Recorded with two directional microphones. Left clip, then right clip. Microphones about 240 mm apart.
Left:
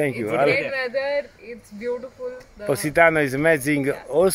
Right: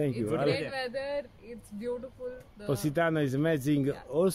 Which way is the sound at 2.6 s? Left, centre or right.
Centre.